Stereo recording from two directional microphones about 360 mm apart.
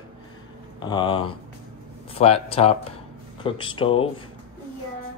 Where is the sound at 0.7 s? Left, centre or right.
Centre.